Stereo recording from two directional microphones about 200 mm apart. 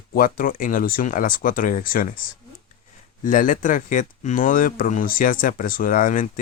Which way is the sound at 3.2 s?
40° left (ahead or behind).